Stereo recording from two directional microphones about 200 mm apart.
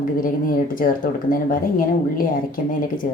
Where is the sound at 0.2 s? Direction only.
45° left (ahead or behind).